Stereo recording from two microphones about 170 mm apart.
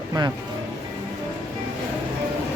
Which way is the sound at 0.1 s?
20° right (ahead or behind).